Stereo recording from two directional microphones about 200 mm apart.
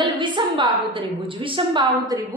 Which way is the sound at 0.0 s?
25° right (ahead or behind).